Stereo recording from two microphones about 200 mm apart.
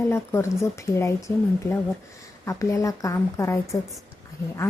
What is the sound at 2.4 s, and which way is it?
A woman's voice, 15° left (ahead or behind).